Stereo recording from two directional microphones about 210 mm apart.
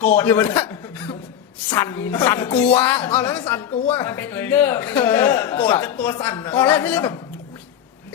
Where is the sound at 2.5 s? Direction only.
10° left (ahead or behind).